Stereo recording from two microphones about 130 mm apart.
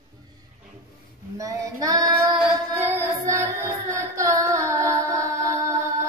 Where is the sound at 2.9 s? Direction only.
20° right (ahead or behind).